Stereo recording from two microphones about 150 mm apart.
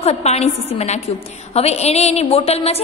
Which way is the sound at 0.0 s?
45° left (ahead or behind).